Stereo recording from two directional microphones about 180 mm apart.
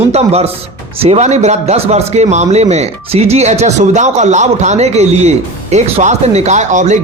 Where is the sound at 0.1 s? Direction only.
35° right (ahead or behind).